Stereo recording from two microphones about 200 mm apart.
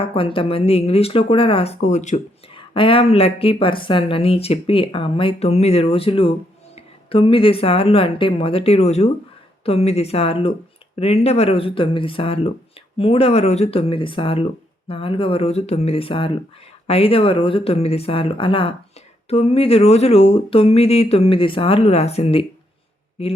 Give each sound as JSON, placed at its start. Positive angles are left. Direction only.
{"t": 0.0, "sound": "speech", "side_deg": 25}